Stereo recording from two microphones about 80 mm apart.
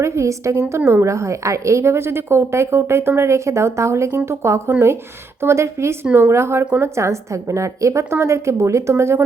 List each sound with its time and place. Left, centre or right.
0.0 s a woman's voice: right